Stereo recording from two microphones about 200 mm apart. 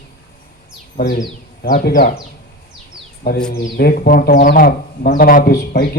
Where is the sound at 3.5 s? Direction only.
50° left (ahead or behind).